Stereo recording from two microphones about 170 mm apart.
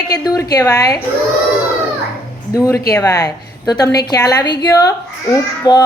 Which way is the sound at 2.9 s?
20° left (ahead or behind).